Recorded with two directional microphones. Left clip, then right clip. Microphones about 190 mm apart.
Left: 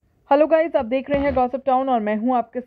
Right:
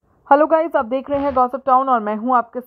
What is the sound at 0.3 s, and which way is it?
A woman's voice, 40° right (ahead or behind).